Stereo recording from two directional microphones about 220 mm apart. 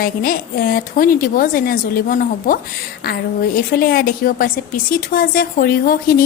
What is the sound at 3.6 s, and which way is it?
A woman's voice, 40° left (ahead or behind).